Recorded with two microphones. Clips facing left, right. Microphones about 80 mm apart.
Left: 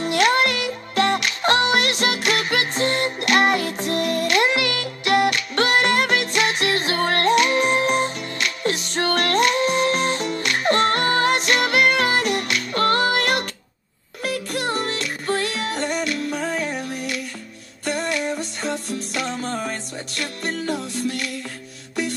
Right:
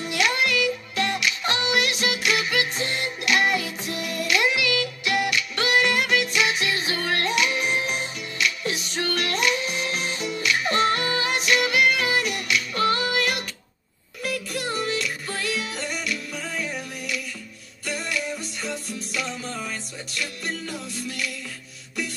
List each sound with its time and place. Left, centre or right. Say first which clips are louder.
0.0 s music: left 6 dB; left